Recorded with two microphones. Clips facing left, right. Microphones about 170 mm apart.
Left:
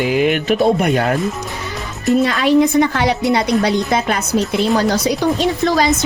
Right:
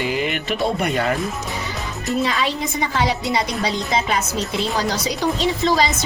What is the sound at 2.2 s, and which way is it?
Speech, 60° left (ahead or behind).